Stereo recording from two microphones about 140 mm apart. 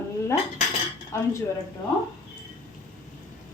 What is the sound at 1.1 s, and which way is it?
Speech, 20° left (ahead or behind).